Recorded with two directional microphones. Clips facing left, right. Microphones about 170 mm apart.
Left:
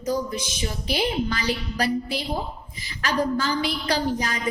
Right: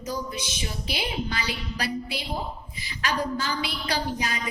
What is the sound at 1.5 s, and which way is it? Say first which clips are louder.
Speech: left 6 dB; 45° left (ahead or behind).